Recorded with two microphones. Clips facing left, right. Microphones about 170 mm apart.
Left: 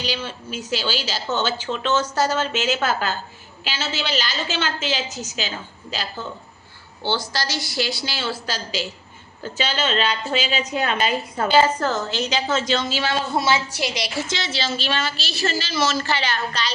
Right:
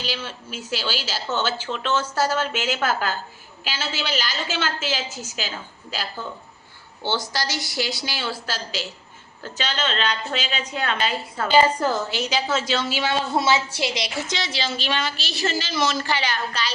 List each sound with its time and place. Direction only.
0.3 s a woman's voice: 5° right (ahead or behind)
7.0 s a woman's voice: 20° right (ahead or behind)
8.4 s a woman's voice: centre (ahead or behind)
11.5 s a woman's voice: 10° right (ahead or behind)